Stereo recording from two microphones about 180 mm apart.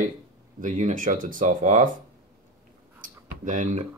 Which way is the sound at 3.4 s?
45° right (ahead or behind).